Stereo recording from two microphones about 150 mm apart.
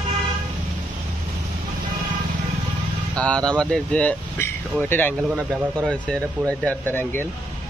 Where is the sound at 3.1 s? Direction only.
5° left (ahead or behind).